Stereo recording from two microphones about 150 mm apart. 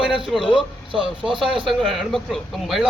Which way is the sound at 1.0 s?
35° right (ahead or behind).